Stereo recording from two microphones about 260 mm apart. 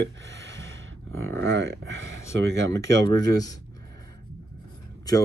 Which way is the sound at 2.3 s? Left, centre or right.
Right.